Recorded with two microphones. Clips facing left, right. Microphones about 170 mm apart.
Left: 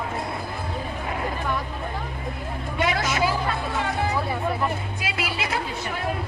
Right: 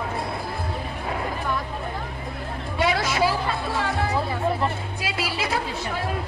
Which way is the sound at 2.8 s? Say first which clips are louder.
Right 1 dB; 30° right (ahead or behind).